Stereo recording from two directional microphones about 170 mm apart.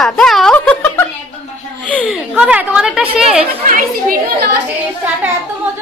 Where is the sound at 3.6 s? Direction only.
55° right (ahead or behind).